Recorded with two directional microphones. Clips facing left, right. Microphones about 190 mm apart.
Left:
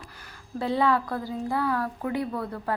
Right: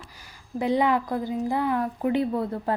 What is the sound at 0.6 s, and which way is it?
A woman's voice, 15° right (ahead or behind).